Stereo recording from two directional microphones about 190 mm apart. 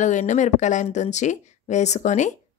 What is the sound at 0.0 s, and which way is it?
Speech, 40° left (ahead or behind).